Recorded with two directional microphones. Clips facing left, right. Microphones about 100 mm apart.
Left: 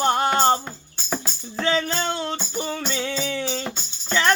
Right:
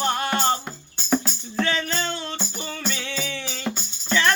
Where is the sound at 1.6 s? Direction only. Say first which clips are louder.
Left 6 dB; 30° left (ahead or behind).